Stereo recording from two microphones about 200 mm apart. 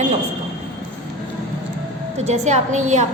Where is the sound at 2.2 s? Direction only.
35° right (ahead or behind).